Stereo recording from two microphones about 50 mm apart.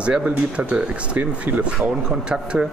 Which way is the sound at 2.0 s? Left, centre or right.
Centre.